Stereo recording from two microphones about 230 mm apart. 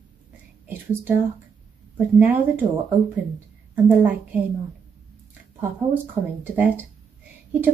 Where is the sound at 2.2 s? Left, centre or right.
Centre.